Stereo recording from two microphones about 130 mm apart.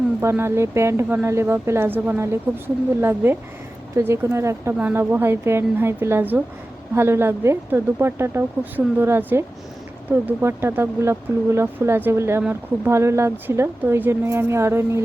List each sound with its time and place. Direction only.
0.2 s a woman's voice: 20° right (ahead or behind)